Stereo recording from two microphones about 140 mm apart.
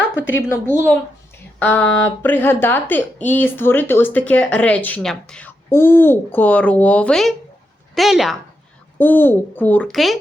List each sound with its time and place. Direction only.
0.4 s a woman's voice: 15° left (ahead or behind); by 8.4 s centre (ahead or behind)
9.0 s speech: 15° left (ahead or behind)
9.9 s a woman's voice: centre (ahead or behind)